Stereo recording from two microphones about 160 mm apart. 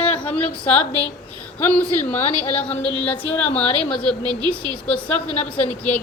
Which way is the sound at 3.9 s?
5° left (ahead or behind).